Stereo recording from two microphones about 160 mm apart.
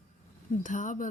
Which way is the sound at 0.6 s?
50° left (ahead or behind).